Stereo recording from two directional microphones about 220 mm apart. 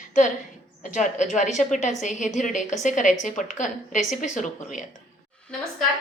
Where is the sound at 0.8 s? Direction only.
35° left (ahead or behind).